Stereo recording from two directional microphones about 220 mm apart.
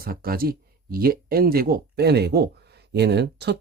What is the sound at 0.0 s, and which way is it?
Speech, 40° right (ahead or behind).